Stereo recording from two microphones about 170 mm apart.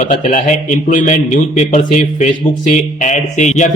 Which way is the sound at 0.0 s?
45° left (ahead or behind).